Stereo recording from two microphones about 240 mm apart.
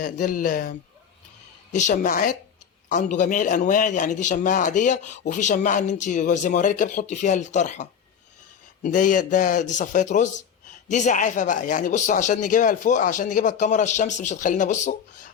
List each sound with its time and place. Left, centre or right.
0.0 s speech: left
1.9 s speech: left